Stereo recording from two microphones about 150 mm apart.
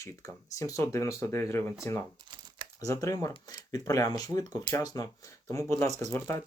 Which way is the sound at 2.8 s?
20° left (ahead or behind).